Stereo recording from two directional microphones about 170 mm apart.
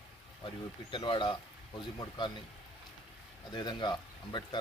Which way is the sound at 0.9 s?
30° left (ahead or behind).